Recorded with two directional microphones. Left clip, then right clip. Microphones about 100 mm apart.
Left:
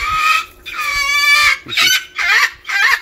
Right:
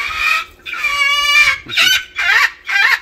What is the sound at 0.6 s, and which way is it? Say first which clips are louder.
Chicken: right 2 dB; 20° right (ahead or behind).